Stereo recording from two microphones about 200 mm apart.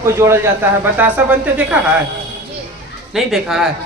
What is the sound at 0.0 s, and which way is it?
Speech, 15° right (ahead or behind).